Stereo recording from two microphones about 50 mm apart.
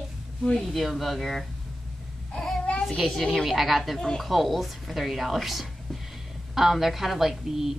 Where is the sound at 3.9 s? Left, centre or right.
Centre.